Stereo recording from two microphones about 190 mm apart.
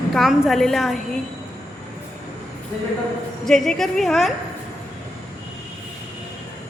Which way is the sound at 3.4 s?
Centre (ahead or behind).